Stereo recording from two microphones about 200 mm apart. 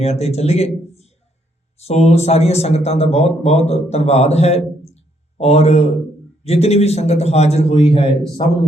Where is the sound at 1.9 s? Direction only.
30° left (ahead or behind).